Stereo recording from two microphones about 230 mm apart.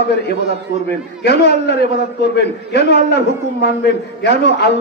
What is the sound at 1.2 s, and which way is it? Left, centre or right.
A man's voice, left.